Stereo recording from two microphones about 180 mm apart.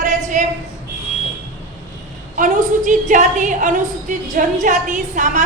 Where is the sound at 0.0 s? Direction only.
45° right (ahead or behind).